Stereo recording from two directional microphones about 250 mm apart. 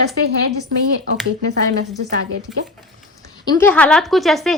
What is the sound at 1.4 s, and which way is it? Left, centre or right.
Speech, right.